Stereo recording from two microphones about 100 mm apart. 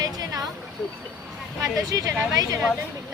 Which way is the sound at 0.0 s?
40° right (ahead or behind).